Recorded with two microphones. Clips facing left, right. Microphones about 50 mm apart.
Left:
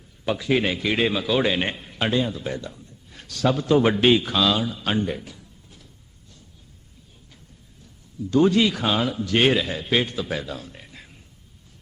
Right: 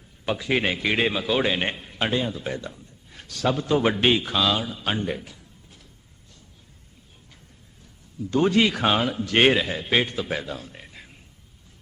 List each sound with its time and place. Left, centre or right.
0.3 s a man's voice: centre
2.4 s a man's voice: centre
3.1 s a man's voice: centre
8.3 s speech: right
9.5 s a man's voice: centre